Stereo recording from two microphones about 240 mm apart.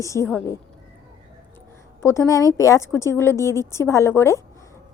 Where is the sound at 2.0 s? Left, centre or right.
Centre.